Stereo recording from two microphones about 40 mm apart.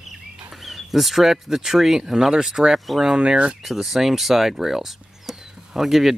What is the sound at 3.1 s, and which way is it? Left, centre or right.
Speech, right.